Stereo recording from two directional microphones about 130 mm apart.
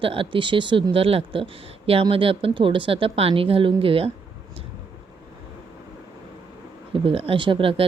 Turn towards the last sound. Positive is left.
turn(degrees=-40)  # may be behind; listen again after turning